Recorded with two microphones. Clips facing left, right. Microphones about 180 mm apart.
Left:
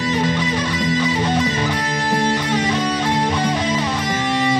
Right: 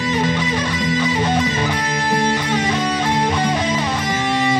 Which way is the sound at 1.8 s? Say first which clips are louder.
Right 1 dB; 45° left (ahead or behind).